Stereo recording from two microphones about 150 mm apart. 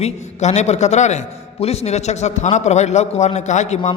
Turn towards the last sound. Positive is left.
turn(degrees=50)  # may be behind; listen again after turning